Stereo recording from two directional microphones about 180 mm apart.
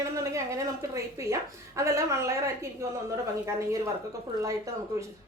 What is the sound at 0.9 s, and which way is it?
Speech, 15° right (ahead or behind).